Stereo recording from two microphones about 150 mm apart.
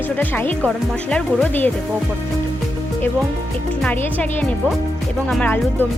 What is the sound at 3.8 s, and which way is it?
Music, 10° left (ahead or behind).